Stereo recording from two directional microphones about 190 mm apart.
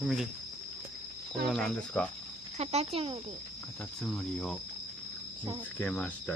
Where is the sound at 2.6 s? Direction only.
35° right (ahead or behind).